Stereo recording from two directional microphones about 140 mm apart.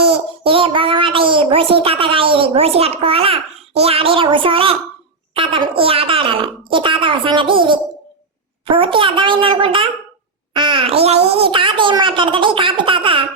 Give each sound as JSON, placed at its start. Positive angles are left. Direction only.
{"t": 0.0, "sound": "a child's voice", "side_deg": -40}